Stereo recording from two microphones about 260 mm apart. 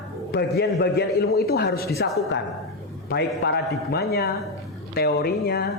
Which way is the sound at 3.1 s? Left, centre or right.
Left.